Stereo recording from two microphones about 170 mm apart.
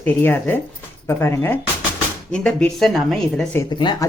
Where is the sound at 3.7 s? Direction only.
25° left (ahead or behind).